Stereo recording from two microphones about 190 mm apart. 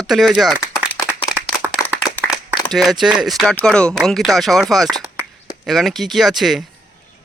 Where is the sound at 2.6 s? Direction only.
Centre (ahead or behind).